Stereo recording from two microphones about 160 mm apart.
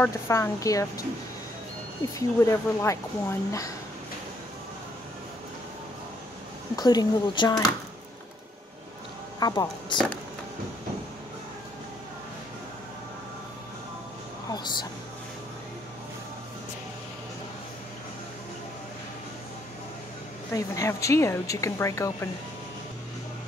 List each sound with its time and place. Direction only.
0.0 s speech: 20° left (ahead or behind)
2.1 s speech: 20° left (ahead or behind)
6.8 s speech: 25° left (ahead or behind)
9.4 s speech: 25° left (ahead or behind)
14.5 s speech: 25° left (ahead or behind)
20.5 s speech: 20° left (ahead or behind)